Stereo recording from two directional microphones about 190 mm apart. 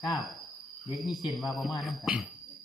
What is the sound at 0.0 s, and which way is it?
Speech, centre (ahead or behind).